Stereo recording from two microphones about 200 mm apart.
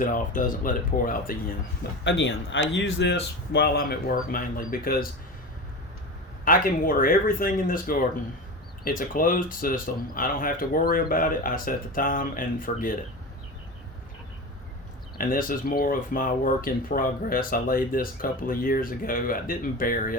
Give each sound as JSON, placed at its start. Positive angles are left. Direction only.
{"t": 0.0, "sound": "speech", "side_deg": 40}
{"t": 2.0, "sound": "speech", "side_deg": 65}
{"t": 6.4, "sound": "speech", "side_deg": 45}
{"t": 15.2, "sound": "speech", "side_deg": 45}